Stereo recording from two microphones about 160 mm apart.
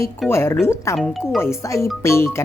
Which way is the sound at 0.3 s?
15° left (ahead or behind).